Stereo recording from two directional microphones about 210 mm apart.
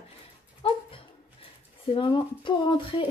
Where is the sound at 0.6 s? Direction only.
25° left (ahead or behind).